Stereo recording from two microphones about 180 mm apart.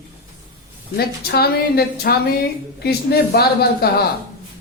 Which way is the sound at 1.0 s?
60° left (ahead or behind).